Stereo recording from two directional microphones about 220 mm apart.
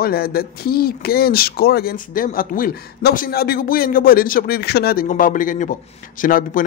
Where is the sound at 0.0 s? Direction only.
45° left (ahead or behind).